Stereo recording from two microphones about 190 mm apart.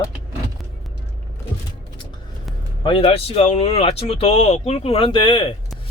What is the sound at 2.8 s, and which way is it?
Speech, 25° left (ahead or behind).